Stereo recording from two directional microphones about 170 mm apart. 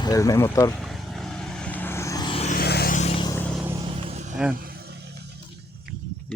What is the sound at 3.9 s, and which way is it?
Music, 35° right (ahead or behind).